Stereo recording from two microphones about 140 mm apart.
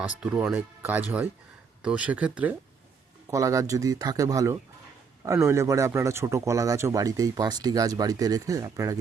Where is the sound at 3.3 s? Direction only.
25° right (ahead or behind).